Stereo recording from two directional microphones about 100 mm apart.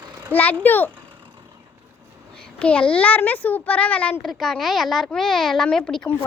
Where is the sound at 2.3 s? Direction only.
10° left (ahead or behind).